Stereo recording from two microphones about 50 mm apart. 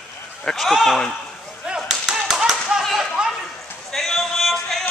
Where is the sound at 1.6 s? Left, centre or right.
Centre.